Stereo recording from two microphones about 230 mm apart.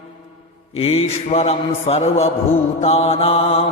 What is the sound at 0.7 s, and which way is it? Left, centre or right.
Mantra, left.